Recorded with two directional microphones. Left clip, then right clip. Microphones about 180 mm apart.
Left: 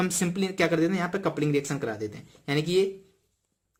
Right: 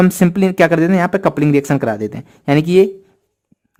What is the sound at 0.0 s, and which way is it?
A man's voice, 45° right (ahead or behind).